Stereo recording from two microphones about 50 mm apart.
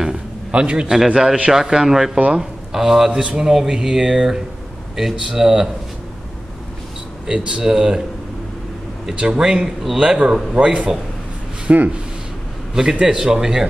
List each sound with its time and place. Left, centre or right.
0.5 s a man's voice: right
0.8 s speech: centre
3.1 s speech: right
7.2 s speech: centre
9.1 s speech: centre
11.6 s speech: right
13.0 s speech: centre